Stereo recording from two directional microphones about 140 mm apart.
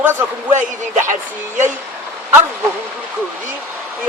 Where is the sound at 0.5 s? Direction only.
60° right (ahead or behind).